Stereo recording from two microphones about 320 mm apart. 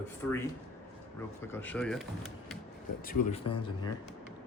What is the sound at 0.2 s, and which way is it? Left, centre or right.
Speech, centre.